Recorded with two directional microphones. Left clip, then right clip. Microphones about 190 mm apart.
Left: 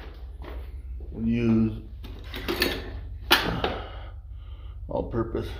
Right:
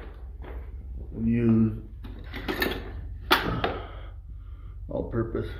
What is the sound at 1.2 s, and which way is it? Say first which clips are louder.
Speech: even; 5° right (ahead or behind).